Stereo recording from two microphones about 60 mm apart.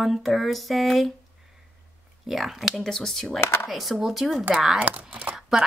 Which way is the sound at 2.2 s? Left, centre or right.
Centre.